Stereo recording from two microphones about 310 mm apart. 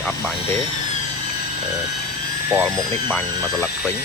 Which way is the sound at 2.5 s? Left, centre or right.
Centre.